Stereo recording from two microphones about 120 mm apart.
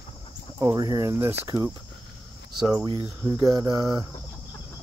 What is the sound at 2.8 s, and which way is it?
Speech, 40° right (ahead or behind).